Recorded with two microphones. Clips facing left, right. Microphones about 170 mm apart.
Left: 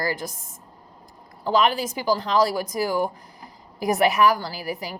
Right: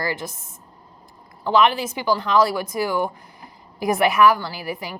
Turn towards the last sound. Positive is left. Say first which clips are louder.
# right 1 dB
turn(degrees=35)  # may be behind; listen again after turning